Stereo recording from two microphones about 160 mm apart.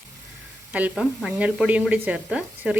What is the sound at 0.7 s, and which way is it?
Speech, 10° right (ahead or behind).